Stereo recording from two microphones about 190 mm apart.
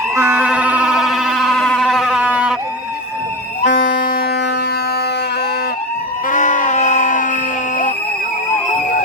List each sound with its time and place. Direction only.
0.2 s siren: 10° right (ahead or behind)
3.6 s music: 45° left (ahead or behind)
6.2 s music: 40° left (ahead or behind)